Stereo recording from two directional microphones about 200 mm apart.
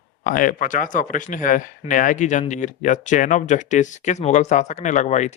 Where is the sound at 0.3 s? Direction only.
40° left (ahead or behind).